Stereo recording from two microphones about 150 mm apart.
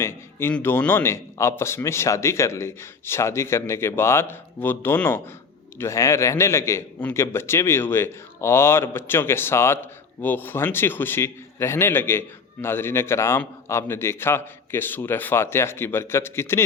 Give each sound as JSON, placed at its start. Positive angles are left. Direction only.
{"t": 0.0, "sound": "a man's voice", "side_deg": 15}